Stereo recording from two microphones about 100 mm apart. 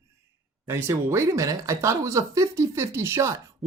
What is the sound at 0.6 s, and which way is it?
Speech, 25° right (ahead or behind).